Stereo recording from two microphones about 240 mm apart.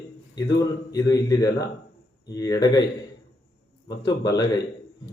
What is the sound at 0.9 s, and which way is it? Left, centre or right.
Speech, centre.